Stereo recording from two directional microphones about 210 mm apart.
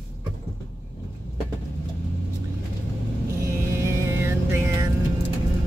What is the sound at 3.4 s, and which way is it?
Music, 15° right (ahead or behind).